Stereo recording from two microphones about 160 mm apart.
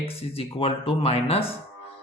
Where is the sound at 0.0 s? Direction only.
35° left (ahead or behind).